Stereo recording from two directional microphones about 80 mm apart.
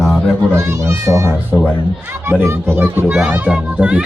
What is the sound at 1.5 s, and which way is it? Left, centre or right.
Speech, centre.